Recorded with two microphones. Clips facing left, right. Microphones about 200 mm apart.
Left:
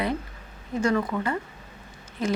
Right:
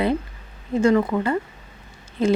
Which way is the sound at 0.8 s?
25° right (ahead or behind).